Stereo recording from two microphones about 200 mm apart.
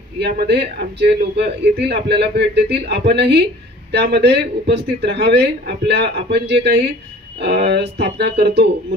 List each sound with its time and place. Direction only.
0.2 s a man's voice: 55° right (ahead or behind)